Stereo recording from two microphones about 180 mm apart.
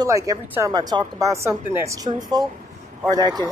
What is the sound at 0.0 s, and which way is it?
Speech, 20° right (ahead or behind).